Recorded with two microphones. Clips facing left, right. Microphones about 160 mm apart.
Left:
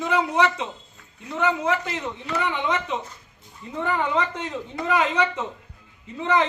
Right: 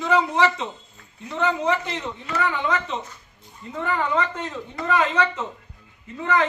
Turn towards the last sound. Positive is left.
turn(degrees=20)  # may be behind; listen again after turning